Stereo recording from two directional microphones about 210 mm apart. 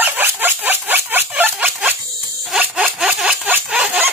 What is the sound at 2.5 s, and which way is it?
Sawing, centre (ahead or behind).